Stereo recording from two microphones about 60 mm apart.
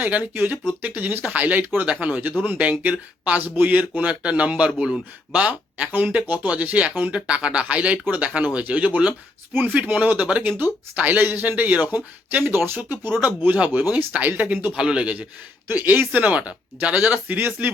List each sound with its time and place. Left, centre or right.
0.0 s speech: right
9.5 s speech: right
13.2 s speech: right
14.7 s speech: centre
15.7 s speech: right